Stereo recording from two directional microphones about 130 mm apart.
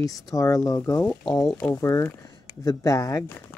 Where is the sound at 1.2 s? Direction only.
Centre (ahead or behind).